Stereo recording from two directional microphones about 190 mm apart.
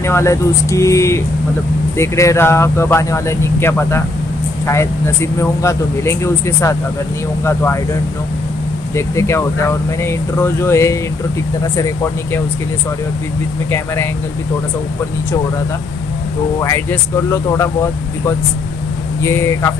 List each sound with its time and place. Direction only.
0.0 s speech: 15° left (ahead or behind)
16.5 s speech: 15° left (ahead or behind)
19.2 s speech: 15° left (ahead or behind)